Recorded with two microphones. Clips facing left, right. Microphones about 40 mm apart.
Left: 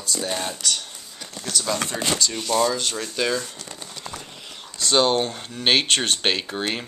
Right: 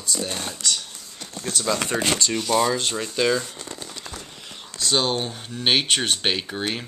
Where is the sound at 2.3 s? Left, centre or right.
Centre.